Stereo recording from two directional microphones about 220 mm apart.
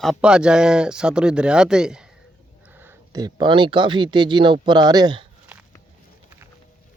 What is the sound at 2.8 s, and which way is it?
Speech, 15° right (ahead or behind).